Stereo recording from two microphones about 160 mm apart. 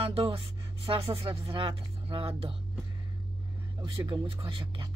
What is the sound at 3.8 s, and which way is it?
Speech, 30° right (ahead or behind).